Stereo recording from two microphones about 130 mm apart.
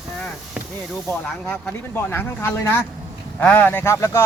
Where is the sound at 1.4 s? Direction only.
10° left (ahead or behind).